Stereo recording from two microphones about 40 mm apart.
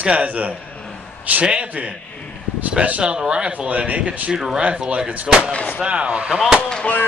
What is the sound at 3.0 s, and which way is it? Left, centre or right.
Speech, right.